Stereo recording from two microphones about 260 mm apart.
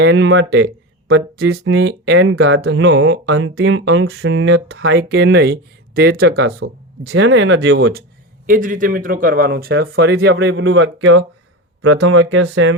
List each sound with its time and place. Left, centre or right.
0.0 s speech: right